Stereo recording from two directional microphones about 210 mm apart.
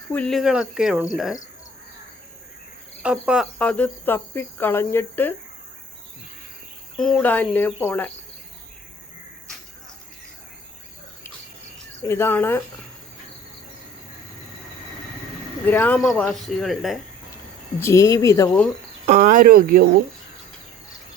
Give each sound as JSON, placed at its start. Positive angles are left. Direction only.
{"t": 0.1, "sound": "speech", "side_deg": 5}
{"t": 3.0, "sound": "speech", "side_deg": -5}
{"t": 3.6, "sound": "speech", "side_deg": 5}
{"t": 6.9, "sound": "speech", "side_deg": 5}
{"t": 12.0, "sound": "speech", "side_deg": 10}
{"t": 15.6, "sound": "speech", "side_deg": 10}
{"t": 17.7, "sound": "speech", "side_deg": 15}
{"t": 19.0, "sound": "speech", "side_deg": -35}